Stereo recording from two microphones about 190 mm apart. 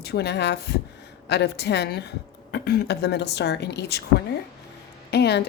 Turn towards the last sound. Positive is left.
turn(degrees=60)  # may be behind; listen again after turning